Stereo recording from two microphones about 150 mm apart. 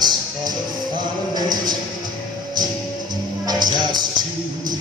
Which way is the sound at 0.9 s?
30° right (ahead or behind).